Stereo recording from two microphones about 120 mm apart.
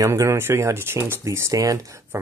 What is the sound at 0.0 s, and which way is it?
Speech, 25° right (ahead or behind).